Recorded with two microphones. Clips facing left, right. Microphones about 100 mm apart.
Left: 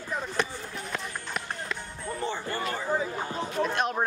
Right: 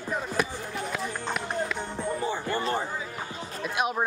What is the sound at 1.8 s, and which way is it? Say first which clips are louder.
Music: right 6 dB; 25° right (ahead or behind).